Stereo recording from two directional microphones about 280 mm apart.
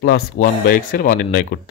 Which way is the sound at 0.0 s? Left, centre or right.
Left.